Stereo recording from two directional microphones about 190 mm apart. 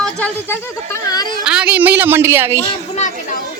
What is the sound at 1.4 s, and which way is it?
Speech, 5° right (ahead or behind).